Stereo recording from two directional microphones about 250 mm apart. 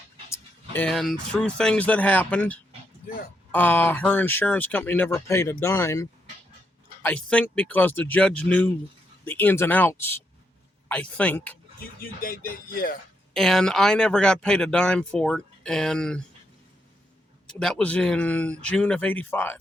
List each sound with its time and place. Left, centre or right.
0.7 s speech: centre
11.8 s speech: left
13.3 s speech: centre
17.4 s speech: centre